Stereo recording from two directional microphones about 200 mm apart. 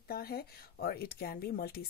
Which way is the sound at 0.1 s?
50° left (ahead or behind).